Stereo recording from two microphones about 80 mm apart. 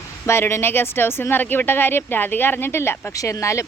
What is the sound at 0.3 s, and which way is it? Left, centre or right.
Speech, left.